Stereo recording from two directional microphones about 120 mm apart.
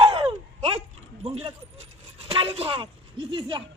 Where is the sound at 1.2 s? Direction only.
45° right (ahead or behind).